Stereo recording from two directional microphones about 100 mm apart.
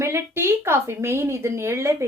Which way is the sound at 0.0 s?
25° right (ahead or behind).